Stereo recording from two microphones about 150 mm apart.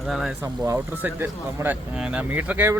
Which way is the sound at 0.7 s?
15° right (ahead or behind).